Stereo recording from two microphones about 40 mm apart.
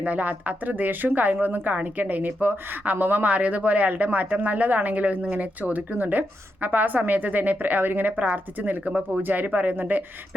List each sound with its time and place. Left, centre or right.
0.0 s a woman's voice: right